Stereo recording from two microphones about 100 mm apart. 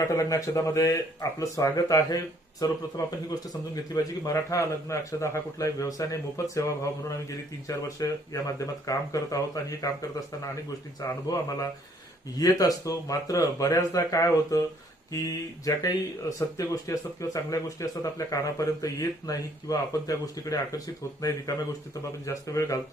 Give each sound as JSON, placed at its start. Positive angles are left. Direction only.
{"t": 0.0, "sound": "speech", "side_deg": 35}
{"t": 11.3, "sound": "speech", "side_deg": 35}